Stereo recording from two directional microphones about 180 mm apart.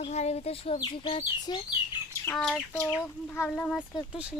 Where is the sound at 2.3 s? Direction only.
5° left (ahead or behind).